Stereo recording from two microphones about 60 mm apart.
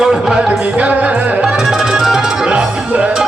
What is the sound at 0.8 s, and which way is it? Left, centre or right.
Music, right.